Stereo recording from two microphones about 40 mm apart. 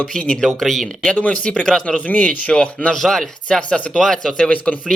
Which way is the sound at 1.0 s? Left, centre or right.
Left.